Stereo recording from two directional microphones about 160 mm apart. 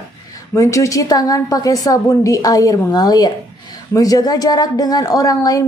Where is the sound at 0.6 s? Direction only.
20° left (ahead or behind).